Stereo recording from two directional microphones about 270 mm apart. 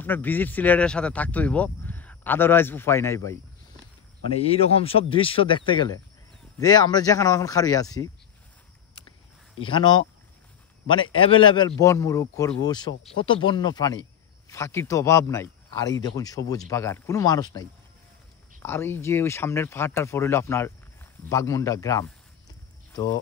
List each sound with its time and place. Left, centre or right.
0.0 s speech: centre
4.3 s speech: left
9.6 s speech: centre
11.1 s speech: centre